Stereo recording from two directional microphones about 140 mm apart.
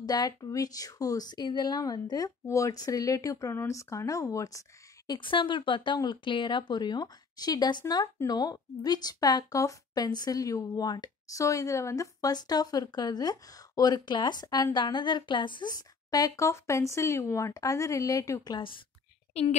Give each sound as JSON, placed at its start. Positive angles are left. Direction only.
{"t": 0.0, "sound": "a woman's voice", "side_deg": 30}